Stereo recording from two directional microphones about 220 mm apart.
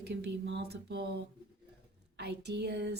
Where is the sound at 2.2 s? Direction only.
50° right (ahead or behind).